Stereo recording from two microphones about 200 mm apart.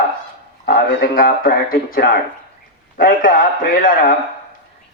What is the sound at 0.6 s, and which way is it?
A man's voice, 45° left (ahead or behind).